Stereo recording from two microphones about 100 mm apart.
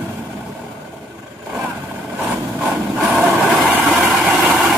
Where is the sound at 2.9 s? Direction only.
10° right (ahead or behind).